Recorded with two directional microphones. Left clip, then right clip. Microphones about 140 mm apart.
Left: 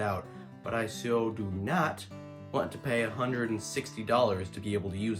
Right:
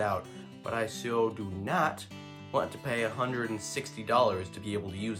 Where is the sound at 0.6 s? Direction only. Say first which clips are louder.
Even; 20° right (ahead or behind).